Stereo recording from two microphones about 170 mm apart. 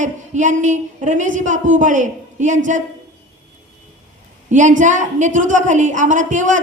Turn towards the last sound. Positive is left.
turn(degrees=-50)  # may be behind; listen again after turning